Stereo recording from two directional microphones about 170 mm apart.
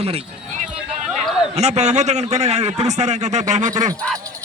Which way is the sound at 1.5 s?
40° right (ahead or behind).